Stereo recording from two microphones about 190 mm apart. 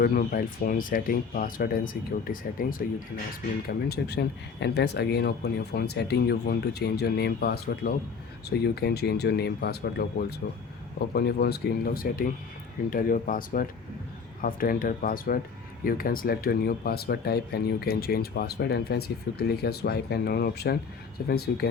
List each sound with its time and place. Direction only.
0.0 s speech: 50° left (ahead or behind)
3.8 s speech: 60° left (ahead or behind)